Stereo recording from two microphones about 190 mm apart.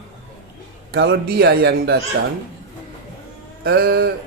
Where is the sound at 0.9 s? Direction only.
60° right (ahead or behind).